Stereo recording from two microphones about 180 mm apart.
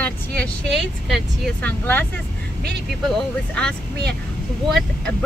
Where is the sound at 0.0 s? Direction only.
5° left (ahead or behind).